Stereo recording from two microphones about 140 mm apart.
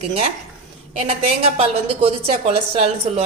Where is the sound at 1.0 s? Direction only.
45° right (ahead or behind).